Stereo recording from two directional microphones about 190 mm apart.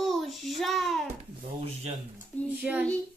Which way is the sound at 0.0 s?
Centre (ahead or behind).